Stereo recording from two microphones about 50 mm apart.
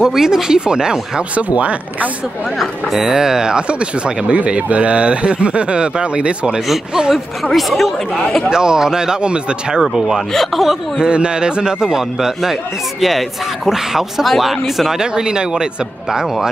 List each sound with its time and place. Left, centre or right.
0.0 s a man's voice: centre
1.3 s speech: right
2.6 s a man's voice: centre
7.5 s speech: centre
8.5 s a man's voice: centre
9.8 s a man's voice: centre
11.0 s a man's voice: centre
13.7 s a man's voice: centre
15.0 s a man's voice: centre